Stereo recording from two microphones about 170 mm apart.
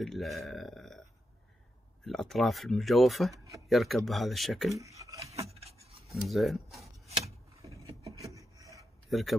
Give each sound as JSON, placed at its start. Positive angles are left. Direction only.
{"t": 0.0, "sound": "speech", "side_deg": 0}
{"t": 2.0, "sound": "speech", "side_deg": 0}
{"t": 4.7, "sound": "speech", "side_deg": -20}
{"t": 5.5, "sound": "rub", "side_deg": -35}
{"t": 6.0, "sound": "speech", "side_deg": 0}
{"t": 7.8, "sound": "a sound", "side_deg": -20}
{"t": 9.1, "sound": "speech", "side_deg": 0}